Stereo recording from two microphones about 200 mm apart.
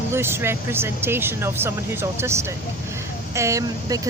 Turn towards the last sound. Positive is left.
turn(degrees=-15)  # may be behind; listen again after turning